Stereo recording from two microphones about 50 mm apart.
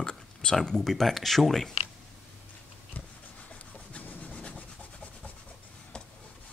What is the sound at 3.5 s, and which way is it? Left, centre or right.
Rub, left.